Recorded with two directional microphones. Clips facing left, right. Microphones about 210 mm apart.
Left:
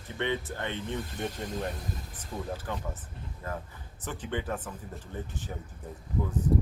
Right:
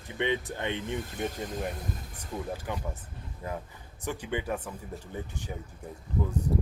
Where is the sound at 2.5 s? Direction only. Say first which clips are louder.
Right 1 dB; 15° right (ahead or behind).